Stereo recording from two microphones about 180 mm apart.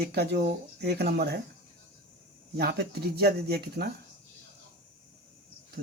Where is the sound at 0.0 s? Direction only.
65° right (ahead or behind).